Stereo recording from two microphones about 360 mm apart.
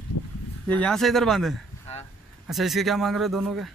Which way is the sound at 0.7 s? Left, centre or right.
Centre.